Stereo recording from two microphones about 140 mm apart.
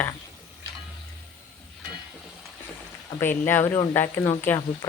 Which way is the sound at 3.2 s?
15° left (ahead or behind).